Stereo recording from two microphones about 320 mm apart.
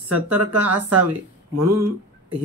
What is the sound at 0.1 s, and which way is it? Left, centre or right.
Speech, right.